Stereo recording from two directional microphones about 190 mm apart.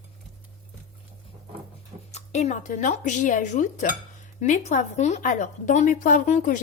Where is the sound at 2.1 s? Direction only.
35° left (ahead or behind).